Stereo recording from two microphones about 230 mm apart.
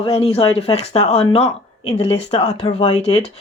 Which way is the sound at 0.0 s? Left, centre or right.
Left.